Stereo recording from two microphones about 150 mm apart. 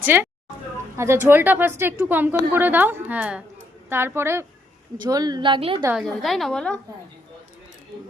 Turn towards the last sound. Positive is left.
turn(degrees=5)  # may be behind; listen again after turning